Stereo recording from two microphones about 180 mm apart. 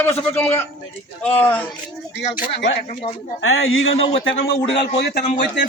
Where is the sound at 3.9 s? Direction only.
35° left (ahead or behind).